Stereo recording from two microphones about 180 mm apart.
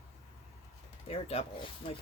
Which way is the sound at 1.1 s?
30° left (ahead or behind).